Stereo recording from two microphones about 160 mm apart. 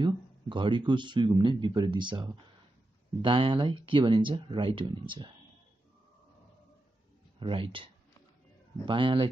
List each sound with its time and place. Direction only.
0.0 s speech: 30° right (ahead or behind)
7.3 s speech: 35° right (ahead or behind)